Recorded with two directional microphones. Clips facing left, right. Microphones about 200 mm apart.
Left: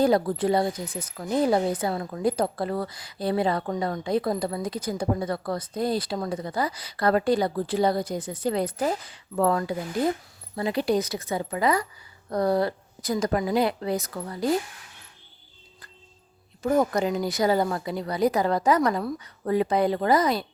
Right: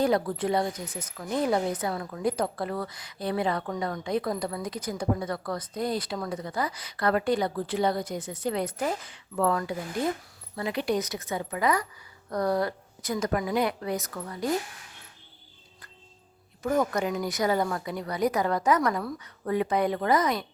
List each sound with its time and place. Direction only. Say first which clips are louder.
0.0 s speech: left 4 dB; 35° left (ahead or behind)
16.6 s speech: left 3 dB; 30° left (ahead or behind)